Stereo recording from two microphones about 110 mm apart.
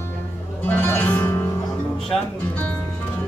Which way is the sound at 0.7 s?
20° left (ahead or behind).